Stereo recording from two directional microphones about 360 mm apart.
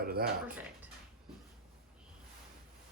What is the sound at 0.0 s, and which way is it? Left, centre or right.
Speech, right.